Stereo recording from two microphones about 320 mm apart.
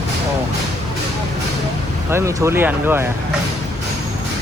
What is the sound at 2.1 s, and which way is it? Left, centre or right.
Speech, centre.